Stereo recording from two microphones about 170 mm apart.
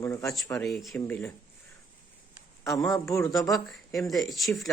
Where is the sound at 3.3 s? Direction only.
Centre (ahead or behind).